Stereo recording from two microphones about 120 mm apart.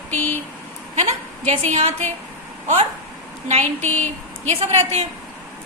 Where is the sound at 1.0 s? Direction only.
70° right (ahead or behind).